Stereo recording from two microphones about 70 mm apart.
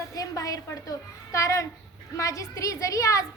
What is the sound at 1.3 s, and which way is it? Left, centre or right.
A child's voice, left.